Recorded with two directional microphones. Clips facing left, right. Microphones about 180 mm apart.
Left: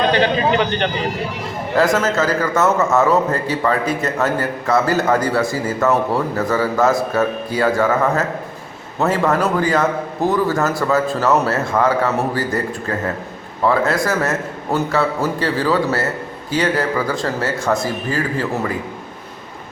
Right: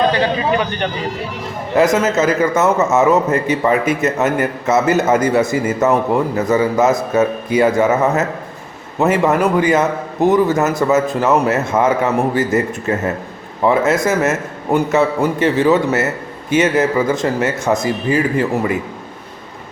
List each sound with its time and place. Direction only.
1.7 s a man's voice: 20° right (ahead or behind)